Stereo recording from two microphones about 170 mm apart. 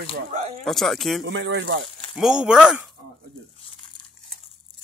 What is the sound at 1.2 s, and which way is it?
Speech, 90° right.